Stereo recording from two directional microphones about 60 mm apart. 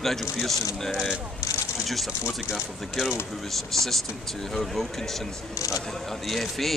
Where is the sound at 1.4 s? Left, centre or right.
Left.